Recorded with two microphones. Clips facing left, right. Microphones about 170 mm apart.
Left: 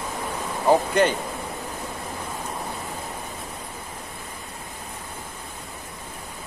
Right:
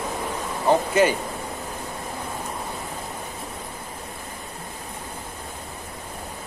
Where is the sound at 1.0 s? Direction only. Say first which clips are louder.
Right 1 dB; 5° right (ahead or behind).